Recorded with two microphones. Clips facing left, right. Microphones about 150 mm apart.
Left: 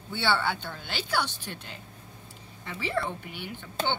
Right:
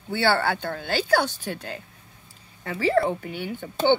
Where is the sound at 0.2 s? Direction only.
90° right.